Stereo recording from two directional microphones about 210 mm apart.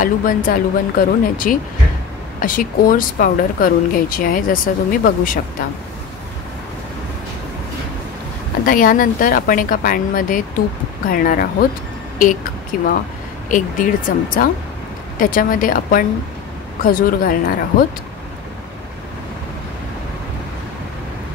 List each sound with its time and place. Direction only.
0.0 s speech: 40° left (ahead or behind)
8.6 s speech: 40° left (ahead or behind)
12.7 s speech: 40° left (ahead or behind)